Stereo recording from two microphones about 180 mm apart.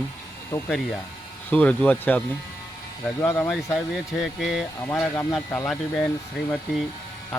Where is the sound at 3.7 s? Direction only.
Centre (ahead or behind).